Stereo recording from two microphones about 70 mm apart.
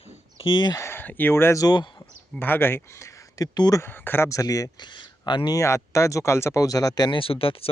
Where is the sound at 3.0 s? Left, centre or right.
Left.